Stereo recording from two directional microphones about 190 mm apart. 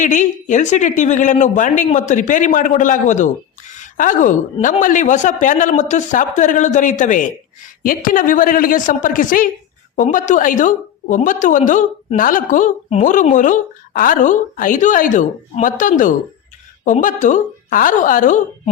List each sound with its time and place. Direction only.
0.0 s a woman's voice: 40° left (ahead or behind)